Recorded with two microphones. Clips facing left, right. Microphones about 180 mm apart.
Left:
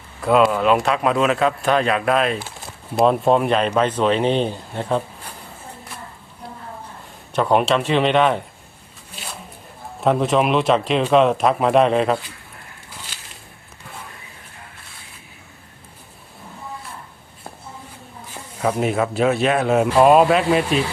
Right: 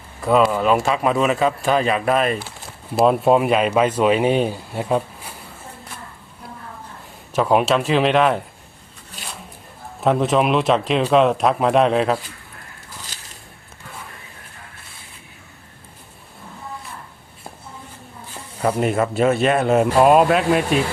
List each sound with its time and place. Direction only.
0.2 s speech: centre (ahead or behind)
7.3 s speech: centre (ahead or behind)
10.0 s speech: centre (ahead or behind)
18.6 s speech: 5° right (ahead or behind)